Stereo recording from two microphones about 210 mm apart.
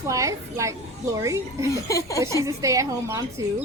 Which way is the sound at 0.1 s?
15° right (ahead or behind).